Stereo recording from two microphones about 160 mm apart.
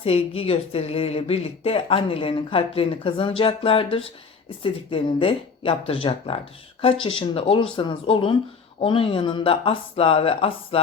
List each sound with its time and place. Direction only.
0.0 s a woman's voice: 40° left (ahead or behind)